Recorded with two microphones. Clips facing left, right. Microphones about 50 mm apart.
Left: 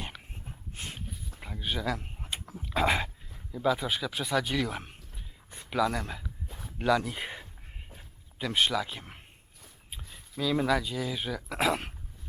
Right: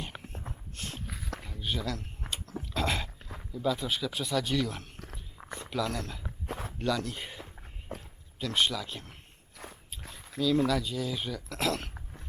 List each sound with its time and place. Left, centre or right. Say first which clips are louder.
0.8 s a sound: even; centre
1.1 s a sound: right 6 dB; right
1.6 s speech: left 3 dB; centre
2.3 s dog: left 3 dB; centre
3.5 s speech: left 2 dB; centre
4.9 s a sound: right 6 dB; right
5.7 s speech: left 5 dB; centre
6.5 s a sound: right 9 dB; right
6.7 s speech: left 5 dB; centre
7.9 s walk: right 13 dB; right
8.4 s speech: left 2 dB; centre
10.3 s speech: even; centre